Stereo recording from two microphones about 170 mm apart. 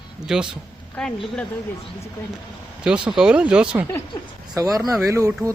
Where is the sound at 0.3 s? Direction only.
5° right (ahead or behind).